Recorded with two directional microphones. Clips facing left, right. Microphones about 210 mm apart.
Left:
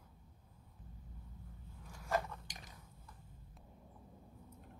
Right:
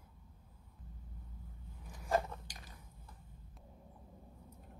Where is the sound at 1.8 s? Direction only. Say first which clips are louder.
Right 2 dB; 15° right (ahead or behind).